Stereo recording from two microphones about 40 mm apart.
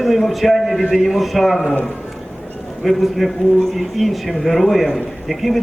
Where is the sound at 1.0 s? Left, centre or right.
Centre.